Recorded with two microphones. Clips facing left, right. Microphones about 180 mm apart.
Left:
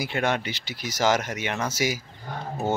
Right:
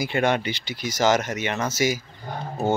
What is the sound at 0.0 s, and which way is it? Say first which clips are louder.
Speech: right 4 dB; centre (ahead or behind).